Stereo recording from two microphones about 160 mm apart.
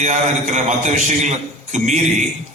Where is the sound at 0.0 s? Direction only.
50° right (ahead or behind).